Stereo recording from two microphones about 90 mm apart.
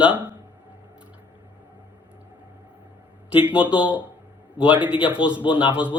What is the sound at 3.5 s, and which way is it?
Speech, 15° right (ahead or behind).